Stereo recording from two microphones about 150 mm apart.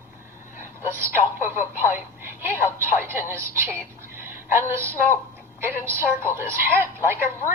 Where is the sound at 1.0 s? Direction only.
15° right (ahead or behind).